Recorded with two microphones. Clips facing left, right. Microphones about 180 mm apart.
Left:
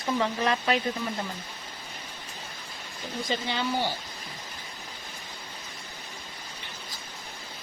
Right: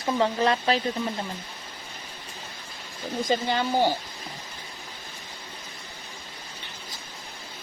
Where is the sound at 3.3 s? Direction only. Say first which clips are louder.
Right 4 dB; 45° right (ahead or behind).